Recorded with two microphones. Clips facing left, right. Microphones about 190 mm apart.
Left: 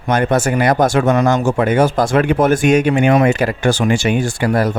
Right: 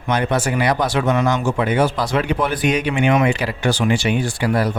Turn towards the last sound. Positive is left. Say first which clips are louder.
# left 3 dB
turn(degrees=45)  # may be behind; listen again after turning